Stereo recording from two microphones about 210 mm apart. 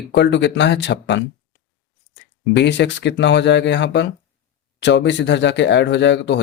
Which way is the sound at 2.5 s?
55° left (ahead or behind).